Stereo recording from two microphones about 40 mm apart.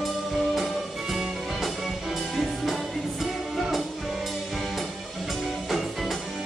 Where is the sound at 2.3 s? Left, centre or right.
Centre.